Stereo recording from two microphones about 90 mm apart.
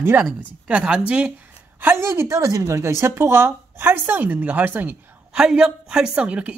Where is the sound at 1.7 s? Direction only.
30° right (ahead or behind).